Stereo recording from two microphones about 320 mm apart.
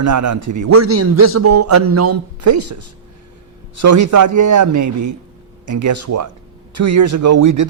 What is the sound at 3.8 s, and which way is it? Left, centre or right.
A man's voice, right.